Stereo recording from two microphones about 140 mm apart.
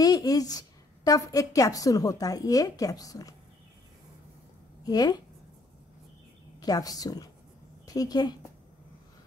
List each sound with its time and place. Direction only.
0.0 s a woman's voice: 25° left (ahead or behind)
4.8 s a woman's voice: 30° left (ahead or behind)
6.6 s a woman's voice: 25° left (ahead or behind)